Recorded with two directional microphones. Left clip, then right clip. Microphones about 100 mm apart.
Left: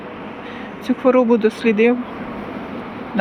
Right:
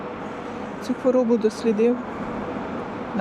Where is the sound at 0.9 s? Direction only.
10° left (ahead or behind).